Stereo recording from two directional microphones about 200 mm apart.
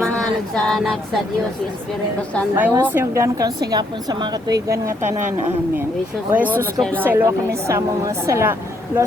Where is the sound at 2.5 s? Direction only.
10° right (ahead or behind).